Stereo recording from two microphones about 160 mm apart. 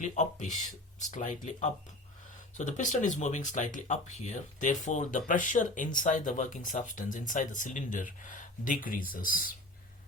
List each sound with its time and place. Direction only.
0.0 s speech: 50° left (ahead or behind)